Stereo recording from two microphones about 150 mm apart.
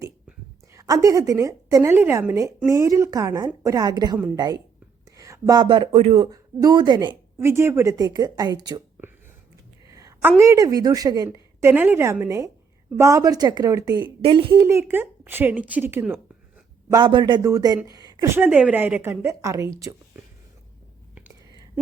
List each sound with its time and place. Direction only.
0.7 s a woman's voice: 25° right (ahead or behind); by 6.2 s 40° right (ahead or behind)
6.2 s a woman's voice: 25° right (ahead or behind)
7.3 s a woman's voice: 15° right (ahead or behind)
9.9 s a woman's voice: 20° right (ahead or behind)
14.2 s speech: 35° right (ahead or behind)
14.6 s a woman's voice: 15° right (ahead or behind)
16.9 s a woman's voice: 30° right (ahead or behind)